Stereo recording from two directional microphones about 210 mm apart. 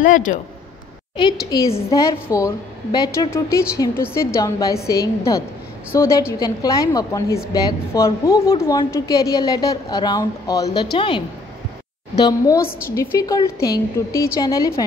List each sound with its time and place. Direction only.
0.0 s a man's voice: 40° left (ahead or behind)
1.1 s a woman's voice: 20° left (ahead or behind)
1.9 s a woman's voice: 15° left (ahead or behind)